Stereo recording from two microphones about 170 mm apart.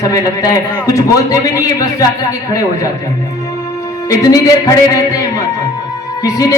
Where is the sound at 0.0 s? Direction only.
20° left (ahead or behind).